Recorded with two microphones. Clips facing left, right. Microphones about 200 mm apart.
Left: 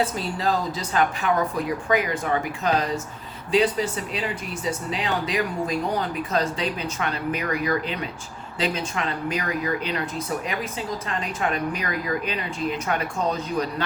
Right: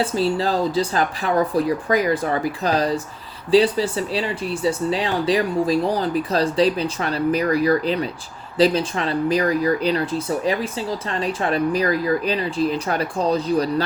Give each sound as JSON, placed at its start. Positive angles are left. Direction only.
{"t": 0.0, "sound": "speech", "side_deg": -30}